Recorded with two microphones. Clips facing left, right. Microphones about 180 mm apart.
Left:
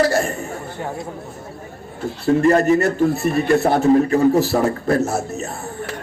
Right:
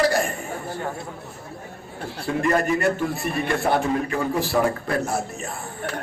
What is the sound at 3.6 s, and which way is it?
A man's voice, 40° left (ahead or behind).